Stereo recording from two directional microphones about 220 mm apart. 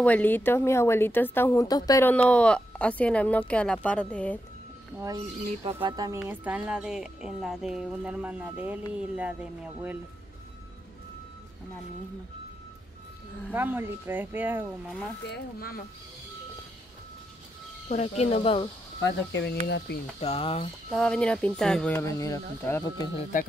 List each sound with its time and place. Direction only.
0.0 s a woman's voice: 5° left (ahead or behind)
5.0 s speech: 15° right (ahead or behind)
6.1 s speech: 5° right (ahead or behind)
13.5 s speech: 10° right (ahead or behind)
15.2 s speech: 45° left (ahead or behind)
17.8 s speech: 30° left (ahead or behind)
19.3 s speech: 50° left (ahead or behind)
20.2 s speech: 25° left (ahead or behind)
20.9 s speech: 5° left (ahead or behind)